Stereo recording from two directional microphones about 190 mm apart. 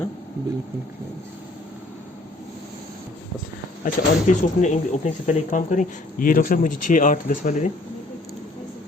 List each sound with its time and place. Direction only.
3.8 s speech: 40° left (ahead or behind)